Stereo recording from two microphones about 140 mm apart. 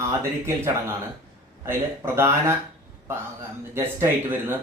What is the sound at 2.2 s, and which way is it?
Speech, 20° right (ahead or behind).